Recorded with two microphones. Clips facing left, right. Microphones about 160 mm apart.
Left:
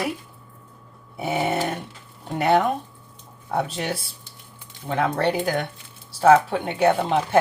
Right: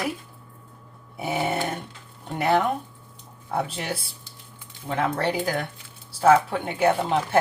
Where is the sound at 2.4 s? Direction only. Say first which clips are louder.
Left 2 dB; 30° left (ahead or behind).